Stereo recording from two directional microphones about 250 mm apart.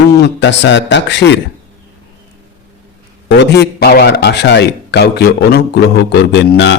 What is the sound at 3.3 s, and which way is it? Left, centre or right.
A man's voice, left.